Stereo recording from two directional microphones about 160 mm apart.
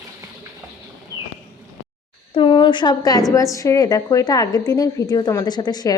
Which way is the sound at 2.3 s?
30° left (ahead or behind).